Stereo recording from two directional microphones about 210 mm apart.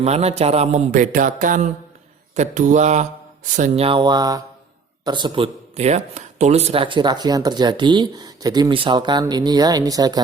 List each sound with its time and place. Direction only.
0.0 s speech: 30° right (ahead or behind)